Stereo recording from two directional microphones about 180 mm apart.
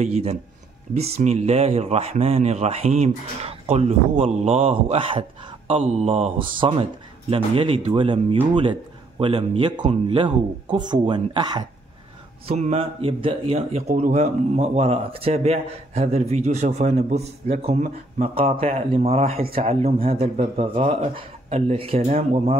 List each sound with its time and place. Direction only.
0.0 s speech: 35° right (ahead or behind)
12.4 s speech: 35° right (ahead or behind)